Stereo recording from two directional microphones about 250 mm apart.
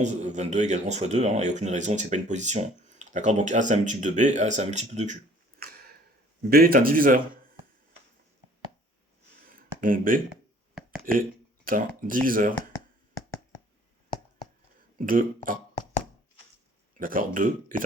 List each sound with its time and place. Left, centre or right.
0.0 s a man's voice: right
9.5 s a sound: right
11.1 s speech: right
14.9 s speech: right
17.0 s speech: right